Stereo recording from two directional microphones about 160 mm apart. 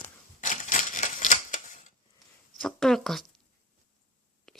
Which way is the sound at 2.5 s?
5° left (ahead or behind).